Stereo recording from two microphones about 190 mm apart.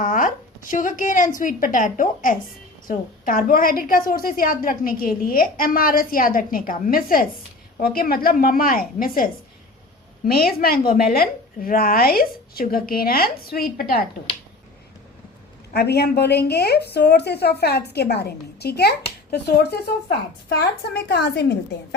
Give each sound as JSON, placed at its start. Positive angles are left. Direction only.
{"t": 0.0, "sound": "a woman's voice", "side_deg": 45}
{"t": 15.7, "sound": "a woman's voice", "side_deg": 60}